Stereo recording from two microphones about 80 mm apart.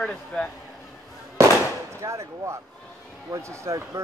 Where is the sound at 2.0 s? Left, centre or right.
Right.